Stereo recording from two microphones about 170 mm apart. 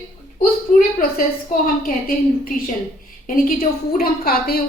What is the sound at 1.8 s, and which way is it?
Speech, 60° left (ahead or behind).